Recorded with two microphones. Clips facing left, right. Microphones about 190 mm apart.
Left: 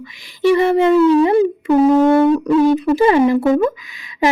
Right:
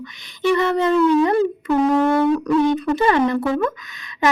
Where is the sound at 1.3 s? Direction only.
15° left (ahead or behind).